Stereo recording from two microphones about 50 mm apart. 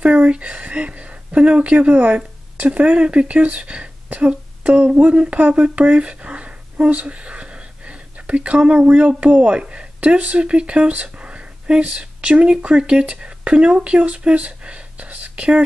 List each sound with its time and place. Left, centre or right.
0.0 s a woman's voice: right